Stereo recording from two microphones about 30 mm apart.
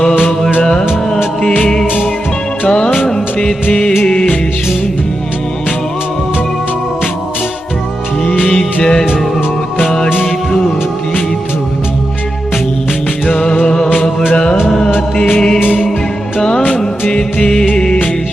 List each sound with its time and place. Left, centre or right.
0.6 s music of bollywood: left
1.4 s music: left
4.0 s music: left
8.8 s music: centre
13.7 s music: left
15.1 s music: left
16.4 s music of bollywood: left
17.5 s music: left